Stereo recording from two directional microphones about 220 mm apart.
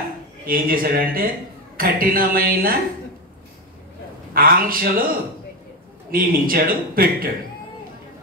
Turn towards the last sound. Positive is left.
turn(degrees=-40)  # may be behind; listen again after turning